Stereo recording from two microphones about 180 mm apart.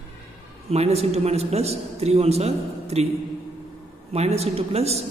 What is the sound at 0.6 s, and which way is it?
A man's voice, 35° right (ahead or behind).